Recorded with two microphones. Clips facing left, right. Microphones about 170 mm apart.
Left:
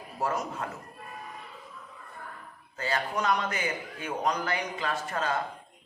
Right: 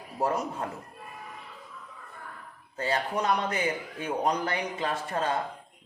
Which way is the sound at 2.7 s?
30° right (ahead or behind).